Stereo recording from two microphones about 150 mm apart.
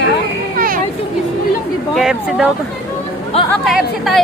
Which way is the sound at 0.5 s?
75° right (ahead or behind).